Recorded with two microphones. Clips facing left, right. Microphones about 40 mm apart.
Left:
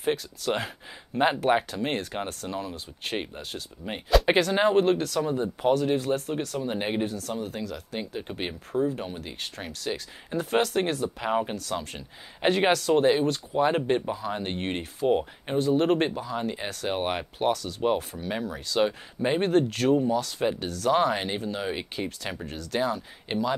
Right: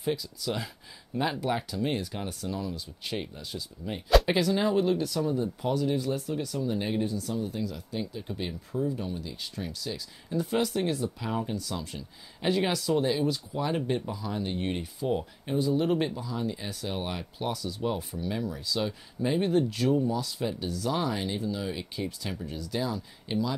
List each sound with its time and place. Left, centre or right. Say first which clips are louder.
0.0 s speech: left 3 dB; left
5.2 s speech: left 3 dB; left
7.2 s speech: even; left
8.1 s speech: left 2 dB; left
11.5 s speech: left 3 dB; left
17.6 s speech: even; left
18.1 s speech: left 1 dB; left
18.8 s speech: left 8 dB; left
19.5 s speech: left 3 dB; left
20.3 s speech: left 4 dB; left
20.9 s speech: left 7 dB; left
22.5 s speech: left 2 dB; left
22.8 s speech: left 5 dB; left